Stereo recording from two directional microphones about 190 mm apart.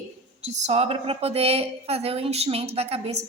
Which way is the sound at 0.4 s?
35° right (ahead or behind).